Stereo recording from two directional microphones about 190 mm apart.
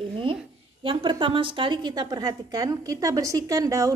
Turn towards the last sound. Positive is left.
turn(degrees=-20)  # may be behind; listen again after turning